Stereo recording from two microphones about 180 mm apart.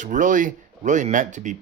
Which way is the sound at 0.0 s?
45° right (ahead or behind).